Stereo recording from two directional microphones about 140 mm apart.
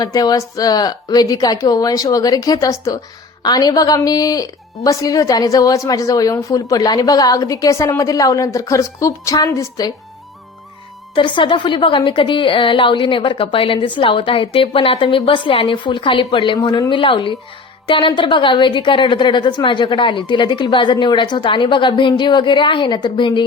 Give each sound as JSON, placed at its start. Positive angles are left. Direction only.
{"t": 0.0, "sound": "a woman's voice", "side_deg": 25}
{"t": 11.1, "sound": "a woman's voice", "side_deg": 35}